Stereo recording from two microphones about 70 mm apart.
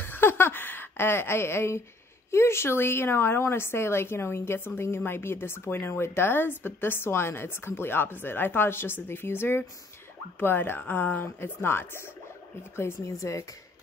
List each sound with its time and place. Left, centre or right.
0.0 s a sound: left
2.3 s a woman's voice: left
13.2 s speech: left